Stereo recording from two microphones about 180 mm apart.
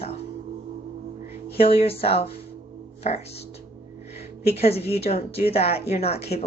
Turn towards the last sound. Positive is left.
turn(degrees=35)  # may be behind; listen again after turning